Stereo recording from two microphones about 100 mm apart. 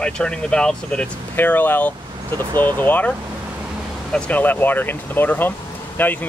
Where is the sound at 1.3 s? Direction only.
20° left (ahead or behind).